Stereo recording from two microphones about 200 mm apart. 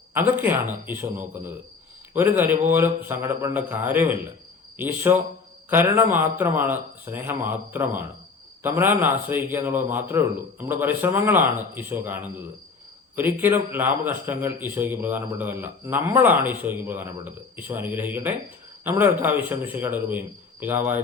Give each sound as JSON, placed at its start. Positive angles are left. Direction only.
{"t": 0.1, "sound": "a man's voice", "side_deg": -10}